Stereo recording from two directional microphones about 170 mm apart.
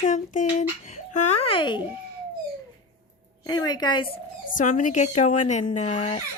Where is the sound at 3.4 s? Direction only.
25° left (ahead or behind).